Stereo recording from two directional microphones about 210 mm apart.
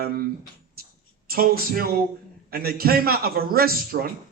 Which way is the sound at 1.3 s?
45° right (ahead or behind).